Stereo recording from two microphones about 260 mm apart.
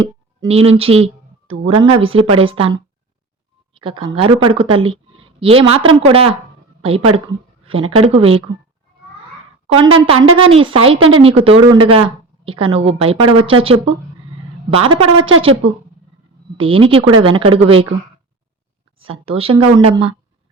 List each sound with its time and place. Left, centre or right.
0.0 s speech: right
3.8 s speech: centre
7.6 s a woman's voice: right
9.7 s speech: centre
16.6 s speech: right
18.9 s speech: right